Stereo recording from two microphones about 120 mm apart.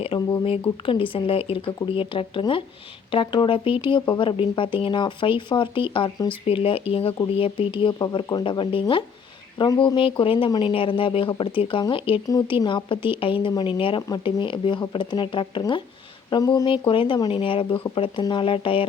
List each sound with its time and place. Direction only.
0.1 s speech: 45° left (ahead or behind)
12.3 s speech: 35° left (ahead or behind)
16.6 s speech: 45° left (ahead or behind)